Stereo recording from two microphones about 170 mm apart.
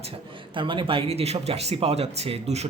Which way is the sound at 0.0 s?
30° right (ahead or behind).